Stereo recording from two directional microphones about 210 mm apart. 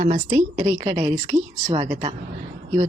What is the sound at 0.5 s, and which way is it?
Speech, 25° right (ahead or behind).